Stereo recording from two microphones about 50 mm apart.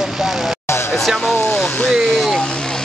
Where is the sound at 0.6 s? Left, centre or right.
Left.